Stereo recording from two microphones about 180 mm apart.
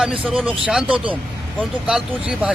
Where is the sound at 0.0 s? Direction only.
5° right (ahead or behind).